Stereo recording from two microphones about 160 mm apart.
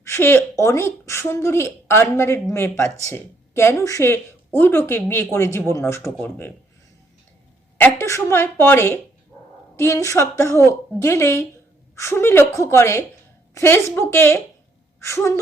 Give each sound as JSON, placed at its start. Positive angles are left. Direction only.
{"t": 0.0, "sound": "speech", "side_deg": 15}
{"t": 7.8, "sound": "speech", "side_deg": 15}